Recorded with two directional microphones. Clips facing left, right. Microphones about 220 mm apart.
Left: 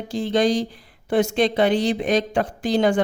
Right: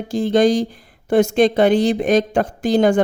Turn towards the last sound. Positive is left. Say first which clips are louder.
# right 4 dB
turn(degrees=-45)  # may be behind; listen again after turning